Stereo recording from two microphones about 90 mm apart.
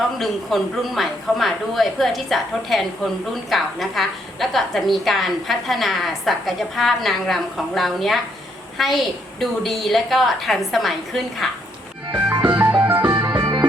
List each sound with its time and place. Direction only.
0.2 s a woman's voice: centre (ahead or behind)
12.5 s music: 20° right (ahead or behind)
13.1 s music: 35° right (ahead or behind)